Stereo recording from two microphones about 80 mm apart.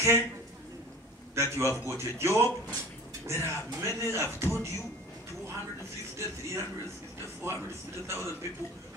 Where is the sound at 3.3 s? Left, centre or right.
Right.